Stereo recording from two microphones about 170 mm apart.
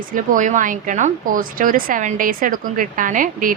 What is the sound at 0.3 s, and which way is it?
A woman's voice, 50° right (ahead or behind).